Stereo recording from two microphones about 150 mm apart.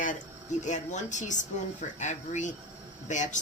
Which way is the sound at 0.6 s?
55° left (ahead or behind).